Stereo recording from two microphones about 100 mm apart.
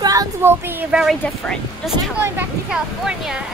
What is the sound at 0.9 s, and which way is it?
Speech, 5° right (ahead or behind).